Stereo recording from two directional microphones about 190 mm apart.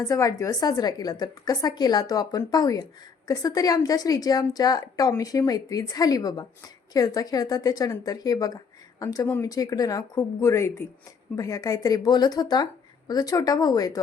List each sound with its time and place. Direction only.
0.0 s a woman's voice: 15° left (ahead or behind)